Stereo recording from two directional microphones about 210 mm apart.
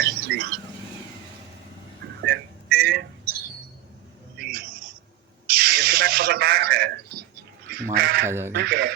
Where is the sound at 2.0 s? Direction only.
50° right (ahead or behind).